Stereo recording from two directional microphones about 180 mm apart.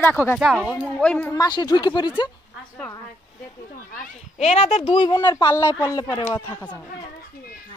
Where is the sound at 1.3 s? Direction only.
20° left (ahead or behind).